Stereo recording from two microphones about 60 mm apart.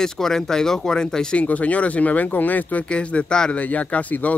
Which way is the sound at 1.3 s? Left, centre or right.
Left.